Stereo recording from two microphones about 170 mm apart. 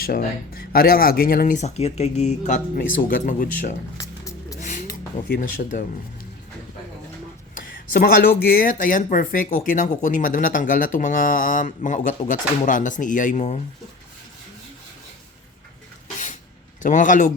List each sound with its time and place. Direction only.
0.0 s speech: 60° left (ahead or behind); by 2.6 s 40° left (ahead or behind)
2.7 s speech: 55° left (ahead or behind)
3.9 s music: 20° left (ahead or behind)
4.6 s a sound: 45° left (ahead or behind)
7.5 s speech: 60° left (ahead or behind); by 13.6 s 45° left (ahead or behind)
16.8 s speech: 50° left (ahead or behind)